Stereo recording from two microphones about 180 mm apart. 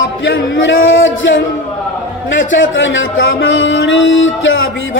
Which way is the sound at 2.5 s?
90° left.